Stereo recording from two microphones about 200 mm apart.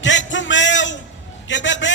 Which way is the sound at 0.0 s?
65° left (ahead or behind).